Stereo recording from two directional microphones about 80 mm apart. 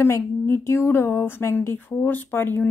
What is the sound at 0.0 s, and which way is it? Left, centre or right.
Speech, left.